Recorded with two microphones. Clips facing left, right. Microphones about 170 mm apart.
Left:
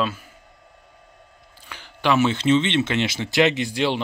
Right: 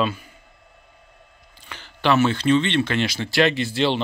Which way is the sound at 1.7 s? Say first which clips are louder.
Right 1 dB; 10° left (ahead or behind).